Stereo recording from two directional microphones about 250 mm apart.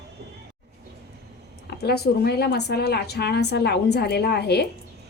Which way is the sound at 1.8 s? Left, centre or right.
Left.